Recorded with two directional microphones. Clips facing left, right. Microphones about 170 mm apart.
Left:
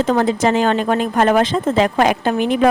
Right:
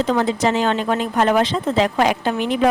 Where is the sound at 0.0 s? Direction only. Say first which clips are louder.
Left 3 dB; 50° left (ahead or behind).